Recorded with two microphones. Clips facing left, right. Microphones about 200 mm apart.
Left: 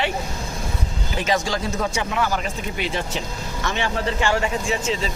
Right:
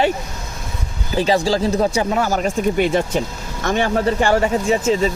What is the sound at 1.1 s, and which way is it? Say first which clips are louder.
Speech: right 7 dB; 35° right (ahead or behind).